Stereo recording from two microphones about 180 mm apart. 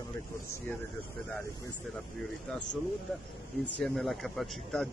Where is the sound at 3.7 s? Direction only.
Centre (ahead or behind).